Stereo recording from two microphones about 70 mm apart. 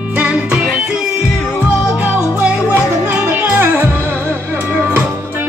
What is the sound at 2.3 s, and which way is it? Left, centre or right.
Music, centre.